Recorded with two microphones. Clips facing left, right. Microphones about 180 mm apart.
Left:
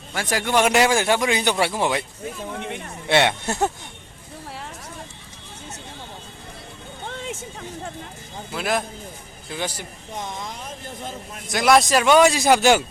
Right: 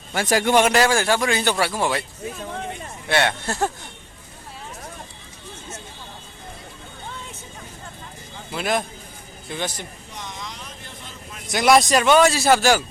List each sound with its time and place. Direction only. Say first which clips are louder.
0.1 s speech: right 5 dB; 30° right (ahead or behind)
0.6 s speech: even; 15° left (ahead or behind)
3.1 s speech: left 2 dB; 20° left (ahead or behind)
7.1 s a sound: left 8 dB; 85° left
8.5 s a man's voice: right 1 dB; centre (ahead or behind)
11.4 s a man's voice: right 1 dB; centre (ahead or behind); by 12.8 s 20° left (ahead or behind)